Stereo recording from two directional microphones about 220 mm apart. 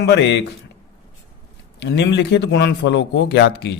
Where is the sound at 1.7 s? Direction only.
50° left (ahead or behind).